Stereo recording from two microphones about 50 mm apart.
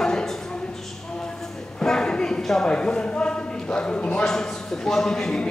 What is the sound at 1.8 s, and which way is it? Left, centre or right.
A man's voice, centre.